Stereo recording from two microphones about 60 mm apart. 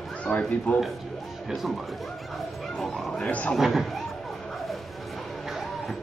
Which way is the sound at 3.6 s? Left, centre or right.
Centre.